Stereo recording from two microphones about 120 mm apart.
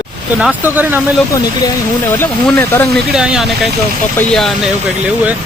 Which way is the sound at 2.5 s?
15° left (ahead or behind).